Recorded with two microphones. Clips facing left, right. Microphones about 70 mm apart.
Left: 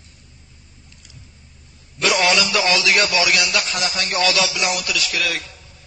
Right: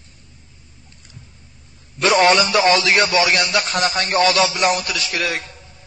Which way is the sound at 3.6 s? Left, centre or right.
Right.